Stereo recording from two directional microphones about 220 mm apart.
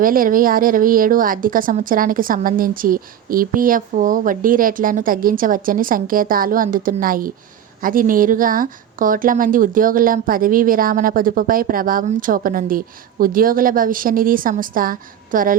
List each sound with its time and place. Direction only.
0.0 s a woman's voice: 40° right (ahead or behind)